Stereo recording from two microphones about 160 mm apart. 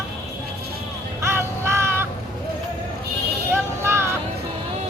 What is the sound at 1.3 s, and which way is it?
Vehicle, 15° right (ahead or behind).